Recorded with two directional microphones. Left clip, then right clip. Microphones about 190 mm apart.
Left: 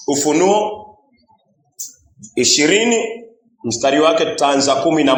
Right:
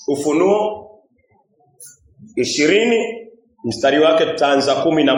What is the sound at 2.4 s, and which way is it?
A man's voice, 20° left (ahead or behind).